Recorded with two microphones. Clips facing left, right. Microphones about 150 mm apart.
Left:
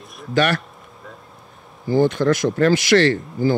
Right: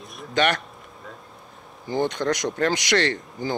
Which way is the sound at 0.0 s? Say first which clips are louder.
Even; centre (ahead or behind).